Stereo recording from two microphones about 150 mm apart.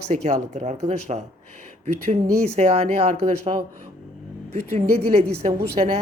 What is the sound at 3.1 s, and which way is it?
Speech, 45° right (ahead or behind).